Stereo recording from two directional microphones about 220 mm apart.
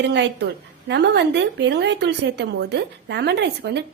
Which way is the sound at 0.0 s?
50° right (ahead or behind).